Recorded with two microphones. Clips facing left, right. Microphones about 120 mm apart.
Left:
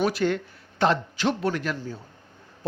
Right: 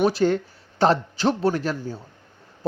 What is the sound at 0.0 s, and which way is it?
Speech, 30° right (ahead or behind).